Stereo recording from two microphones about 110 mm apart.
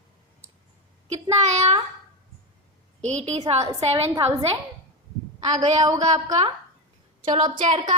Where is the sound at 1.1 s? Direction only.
80° right.